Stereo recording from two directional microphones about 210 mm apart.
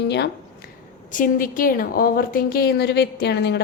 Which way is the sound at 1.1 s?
40° left (ahead or behind).